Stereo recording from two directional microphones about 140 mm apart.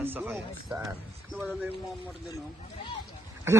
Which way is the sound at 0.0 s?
15° right (ahead or behind).